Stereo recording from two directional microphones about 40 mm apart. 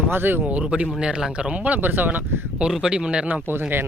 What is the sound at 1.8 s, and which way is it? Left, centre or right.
Speech, right.